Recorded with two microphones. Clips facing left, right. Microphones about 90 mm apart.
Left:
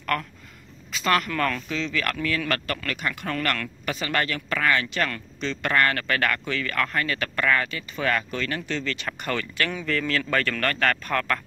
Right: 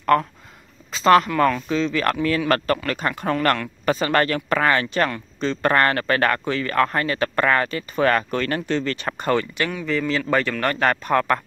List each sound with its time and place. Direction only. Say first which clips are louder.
0.0 s speech: right 9 dB; 30° right (ahead or behind)
9.8 s speech: right 6 dB; 15° right (ahead or behind)